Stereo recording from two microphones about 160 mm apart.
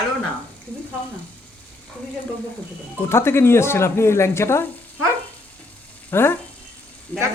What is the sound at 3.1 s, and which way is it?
Speech, 15° left (ahead or behind).